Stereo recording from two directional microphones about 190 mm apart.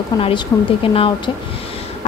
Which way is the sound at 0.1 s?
20° left (ahead or behind).